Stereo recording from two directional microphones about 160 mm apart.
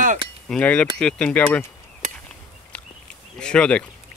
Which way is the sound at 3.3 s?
5° left (ahead or behind).